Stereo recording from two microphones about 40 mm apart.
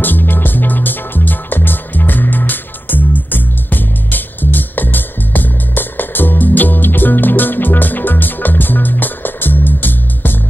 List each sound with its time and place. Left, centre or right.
0.0 s music: left